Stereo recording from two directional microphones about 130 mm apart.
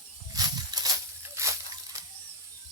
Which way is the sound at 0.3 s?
30° right (ahead or behind).